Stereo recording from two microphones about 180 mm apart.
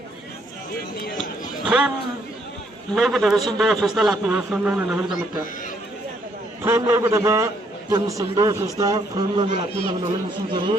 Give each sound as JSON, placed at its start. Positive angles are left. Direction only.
{"t": 1.6, "sound": "a man's voice", "side_deg": -5}
{"t": 2.9, "sound": "a man's voice", "side_deg": 0}
{"t": 6.6, "sound": "a man's voice", "side_deg": -15}
{"t": 10.5, "sound": "speech", "side_deg": -25}